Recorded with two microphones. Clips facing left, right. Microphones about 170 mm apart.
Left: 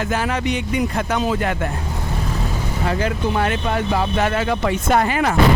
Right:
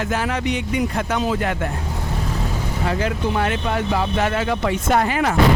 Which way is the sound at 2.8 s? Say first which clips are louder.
Left 1 dB; 45° left (ahead or behind).